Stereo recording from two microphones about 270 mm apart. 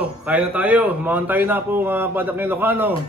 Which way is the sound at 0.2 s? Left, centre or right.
Centre.